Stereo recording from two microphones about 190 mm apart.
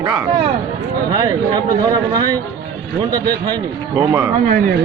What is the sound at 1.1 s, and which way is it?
A man's voice, 20° right (ahead or behind).